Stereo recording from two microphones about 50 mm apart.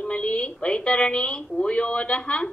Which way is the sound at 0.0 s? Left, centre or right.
Left.